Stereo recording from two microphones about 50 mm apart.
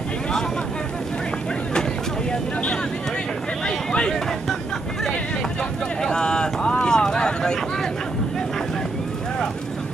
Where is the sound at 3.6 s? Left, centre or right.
Centre.